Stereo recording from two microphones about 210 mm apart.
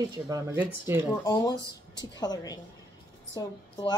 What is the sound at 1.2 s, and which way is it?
A woman's voice, 20° left (ahead or behind).